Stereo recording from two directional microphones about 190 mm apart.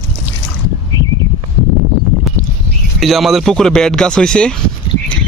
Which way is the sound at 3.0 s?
Centre (ahead or behind).